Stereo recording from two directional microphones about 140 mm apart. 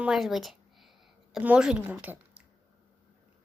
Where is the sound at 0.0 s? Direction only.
5° right (ahead or behind).